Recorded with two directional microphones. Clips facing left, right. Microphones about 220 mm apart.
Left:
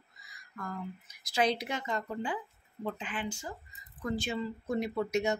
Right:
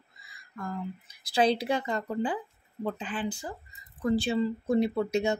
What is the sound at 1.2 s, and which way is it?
Speech, 30° right (ahead or behind).